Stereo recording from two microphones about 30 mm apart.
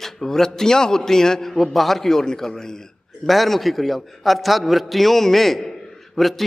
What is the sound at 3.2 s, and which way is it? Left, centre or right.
A man's voice, centre.